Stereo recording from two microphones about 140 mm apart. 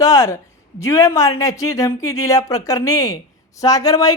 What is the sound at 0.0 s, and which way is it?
Speech, 25° left (ahead or behind).